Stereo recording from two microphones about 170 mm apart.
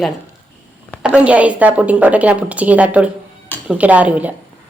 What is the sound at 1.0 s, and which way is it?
A woman's voice, 5° right (ahead or behind).